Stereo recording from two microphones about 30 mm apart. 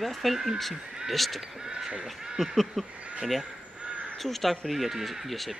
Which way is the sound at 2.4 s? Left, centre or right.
Centre.